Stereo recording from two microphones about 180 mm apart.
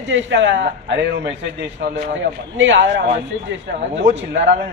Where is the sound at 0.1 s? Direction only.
90° right.